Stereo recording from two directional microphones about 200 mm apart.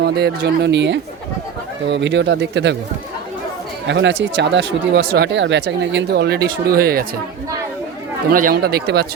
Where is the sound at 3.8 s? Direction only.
65° right (ahead or behind); by 7.1 s 45° right (ahead or behind).